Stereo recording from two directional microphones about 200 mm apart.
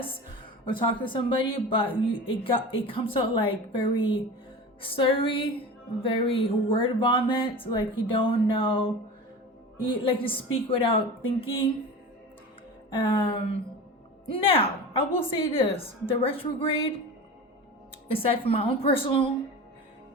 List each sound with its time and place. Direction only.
0.8 s speech: 25° left (ahead or behind)
12.9 s speech: 25° left (ahead or behind)
18.1 s speech: 25° left (ahead or behind)